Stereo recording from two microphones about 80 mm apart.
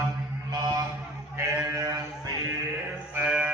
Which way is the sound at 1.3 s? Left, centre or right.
Right.